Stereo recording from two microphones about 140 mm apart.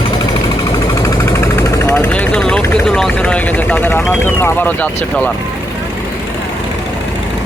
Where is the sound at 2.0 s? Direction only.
10° left (ahead or behind).